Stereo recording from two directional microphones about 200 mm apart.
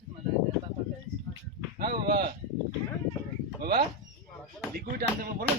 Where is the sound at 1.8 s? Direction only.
50° right (ahead or behind).